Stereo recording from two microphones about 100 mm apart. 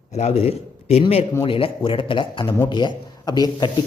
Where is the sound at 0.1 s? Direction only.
90° left.